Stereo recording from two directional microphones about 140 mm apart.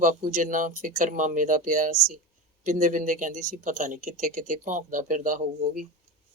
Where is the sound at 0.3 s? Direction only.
65° right (ahead or behind).